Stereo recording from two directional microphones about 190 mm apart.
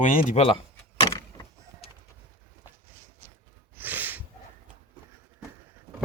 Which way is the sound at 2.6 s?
10° right (ahead or behind).